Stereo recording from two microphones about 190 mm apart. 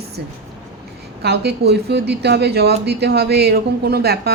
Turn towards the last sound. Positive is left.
turn(degrees=-55)  # may be behind; listen again after turning